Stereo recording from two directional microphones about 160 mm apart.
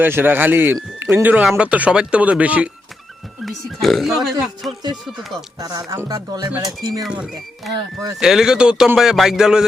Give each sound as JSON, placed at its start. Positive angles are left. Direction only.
{"t": 0.0, "sound": "speech", "side_deg": -15}
{"t": 5.5, "sound": "speech", "side_deg": -25}
{"t": 7.0, "sound": "speech", "side_deg": -5}